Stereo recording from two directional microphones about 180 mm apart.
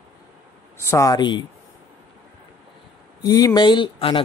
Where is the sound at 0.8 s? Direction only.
15° left (ahead or behind).